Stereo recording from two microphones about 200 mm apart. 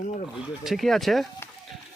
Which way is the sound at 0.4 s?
Centre (ahead or behind).